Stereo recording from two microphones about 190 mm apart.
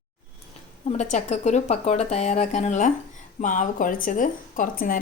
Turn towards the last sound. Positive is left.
turn(degrees=50)  # may be behind; listen again after turning